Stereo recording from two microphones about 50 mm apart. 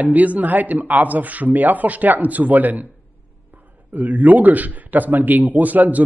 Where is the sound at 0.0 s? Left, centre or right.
Right.